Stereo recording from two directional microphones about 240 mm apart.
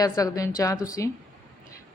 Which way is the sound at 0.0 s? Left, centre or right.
Centre.